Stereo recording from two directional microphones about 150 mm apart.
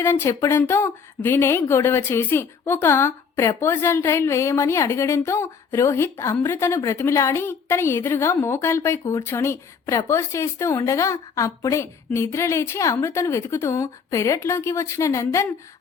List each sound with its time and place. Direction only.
0.0 s speech: 15° left (ahead or behind)